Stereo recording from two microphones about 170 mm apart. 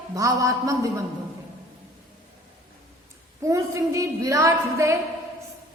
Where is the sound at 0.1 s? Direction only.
20° right (ahead or behind).